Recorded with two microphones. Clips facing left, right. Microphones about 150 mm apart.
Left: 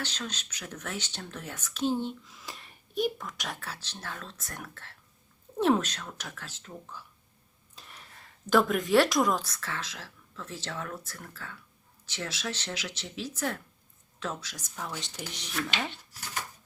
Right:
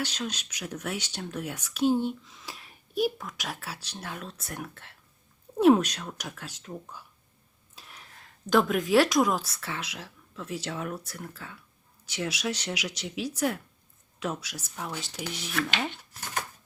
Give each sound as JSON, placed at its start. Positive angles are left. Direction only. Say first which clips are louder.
{"t": 0.0, "sound": "speech", "louder": "right 4 dB", "side_deg": -10}
{"t": 2.2, "sound": "speech", "louder": "right 1 dB", "side_deg": 0}
{"t": 7.8, "sound": "speech", "louder": "even", "side_deg": 0}
{"t": 15.6, "sound": "speech", "louder": "right 3 dB", "side_deg": -70}